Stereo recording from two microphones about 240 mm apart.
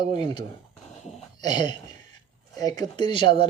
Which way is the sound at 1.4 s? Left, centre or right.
Centre.